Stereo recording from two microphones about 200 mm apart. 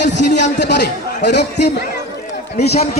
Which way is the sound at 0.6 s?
60° left (ahead or behind).